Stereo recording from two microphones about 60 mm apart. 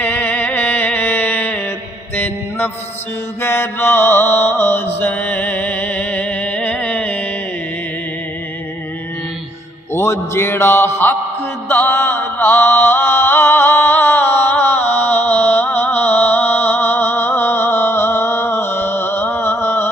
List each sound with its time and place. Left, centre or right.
0.0 s music: left
2.1 s mantra: left
3.4 s mantra: left
9.9 s a man's voice: left
11.7 s music: left
11.9 s mantra: left